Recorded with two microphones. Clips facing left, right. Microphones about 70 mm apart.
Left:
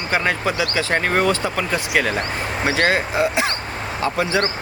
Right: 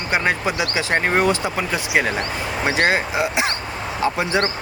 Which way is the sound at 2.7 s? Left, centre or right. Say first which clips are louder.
Left 1 dB; centre.